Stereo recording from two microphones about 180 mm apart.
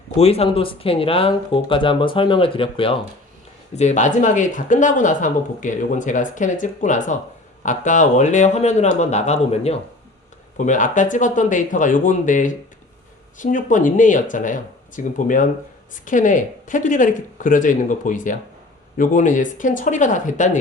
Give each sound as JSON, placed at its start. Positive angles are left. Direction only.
{"t": 0.2, "sound": "speech", "side_deg": 35}
{"t": 3.8, "sound": "speech", "side_deg": 40}